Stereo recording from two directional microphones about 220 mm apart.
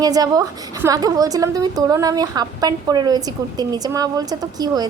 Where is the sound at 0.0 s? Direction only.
15° right (ahead or behind).